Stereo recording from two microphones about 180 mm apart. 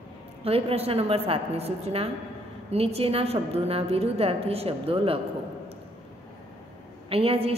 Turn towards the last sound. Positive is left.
turn(degrees=-30)  # may be behind; listen again after turning